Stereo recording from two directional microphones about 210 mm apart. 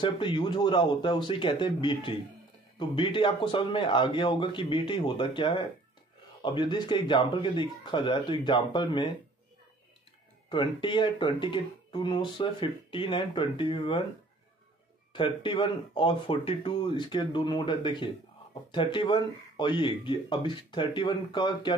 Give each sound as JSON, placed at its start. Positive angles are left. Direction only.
{"t": 0.0, "sound": "speech", "side_deg": 20}
{"t": 10.5, "sound": "speech", "side_deg": 20}
{"t": 15.1, "sound": "speech", "side_deg": 25}